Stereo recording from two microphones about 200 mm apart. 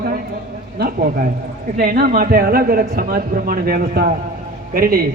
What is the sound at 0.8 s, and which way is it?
A man's voice, 45° right (ahead or behind).